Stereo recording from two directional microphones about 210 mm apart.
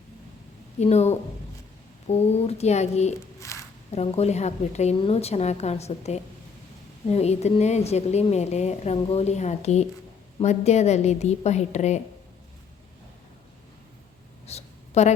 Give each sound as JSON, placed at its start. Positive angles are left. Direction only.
{"t": 0.8, "sound": "speech", "side_deg": 30}
{"t": 3.5, "sound": "zipper", "side_deg": 15}
{"t": 3.9, "sound": "speech", "side_deg": 30}
{"t": 14.4, "sound": "a sound", "side_deg": 30}